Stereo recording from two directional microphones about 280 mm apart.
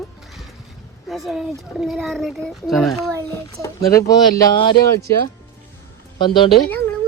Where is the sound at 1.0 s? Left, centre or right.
Centre.